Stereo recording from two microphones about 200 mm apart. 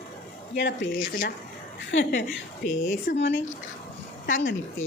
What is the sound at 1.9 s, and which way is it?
Speech, 70° left (ahead or behind).